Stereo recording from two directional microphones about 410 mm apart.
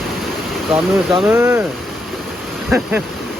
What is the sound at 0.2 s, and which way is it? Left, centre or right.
Speech, centre.